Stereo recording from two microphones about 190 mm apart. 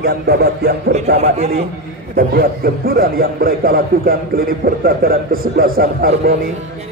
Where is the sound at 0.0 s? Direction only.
55° right (ahead or behind).